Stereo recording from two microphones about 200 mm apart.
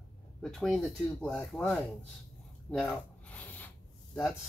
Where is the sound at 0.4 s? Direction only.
Centre (ahead or behind).